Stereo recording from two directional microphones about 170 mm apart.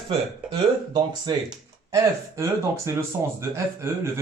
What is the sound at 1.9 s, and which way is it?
Speech, 20° right (ahead or behind).